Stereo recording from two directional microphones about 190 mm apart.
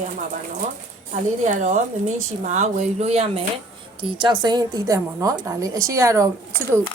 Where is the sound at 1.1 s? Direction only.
40° right (ahead or behind).